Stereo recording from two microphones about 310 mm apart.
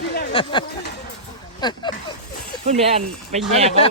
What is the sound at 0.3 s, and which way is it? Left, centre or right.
Speech, centre.